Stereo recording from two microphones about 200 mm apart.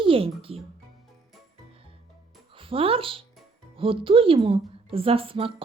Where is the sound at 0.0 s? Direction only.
25° right (ahead or behind).